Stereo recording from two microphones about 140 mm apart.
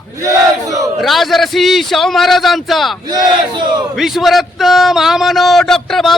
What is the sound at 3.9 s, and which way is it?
A man's voice, centre (ahead or behind).